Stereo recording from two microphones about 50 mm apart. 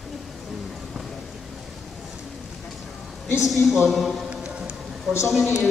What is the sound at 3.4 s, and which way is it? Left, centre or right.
Speech, centre.